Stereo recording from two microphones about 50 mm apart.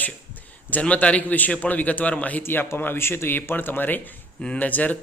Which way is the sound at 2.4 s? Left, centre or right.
Left.